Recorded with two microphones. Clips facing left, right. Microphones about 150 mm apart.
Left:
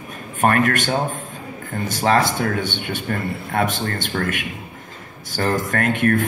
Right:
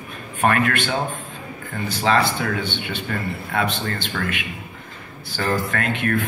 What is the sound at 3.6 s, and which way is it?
Speech, 45° left (ahead or behind).